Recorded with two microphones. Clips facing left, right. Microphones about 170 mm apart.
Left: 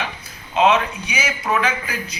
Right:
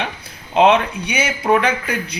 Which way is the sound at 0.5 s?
60° right (ahead or behind).